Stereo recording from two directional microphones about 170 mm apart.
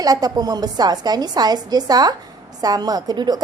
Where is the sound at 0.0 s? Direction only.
20° right (ahead or behind).